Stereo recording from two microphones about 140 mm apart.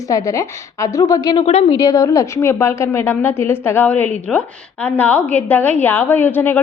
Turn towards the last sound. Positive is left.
turn(degrees=15)  # may be behind; listen again after turning